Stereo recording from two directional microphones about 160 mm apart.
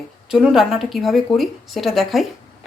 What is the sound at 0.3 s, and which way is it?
Speech, centre (ahead or behind).